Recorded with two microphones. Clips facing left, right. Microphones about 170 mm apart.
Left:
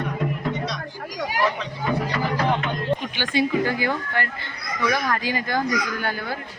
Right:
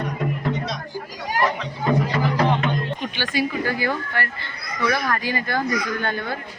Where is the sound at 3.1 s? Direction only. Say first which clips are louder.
Even; 15° left (ahead or behind).